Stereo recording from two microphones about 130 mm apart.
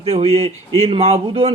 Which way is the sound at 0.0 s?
50° right (ahead or behind).